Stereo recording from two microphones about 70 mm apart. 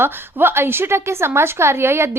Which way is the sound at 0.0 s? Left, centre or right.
Right.